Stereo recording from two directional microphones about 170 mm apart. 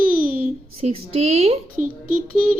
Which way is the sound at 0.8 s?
35° right (ahead or behind).